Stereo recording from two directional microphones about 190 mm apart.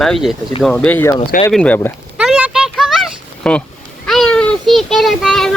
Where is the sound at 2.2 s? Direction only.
5° right (ahead or behind).